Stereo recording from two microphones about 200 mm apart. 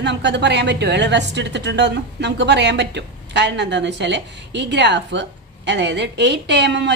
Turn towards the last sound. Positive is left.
turn(degrees=-60)  # may be behind; listen again after turning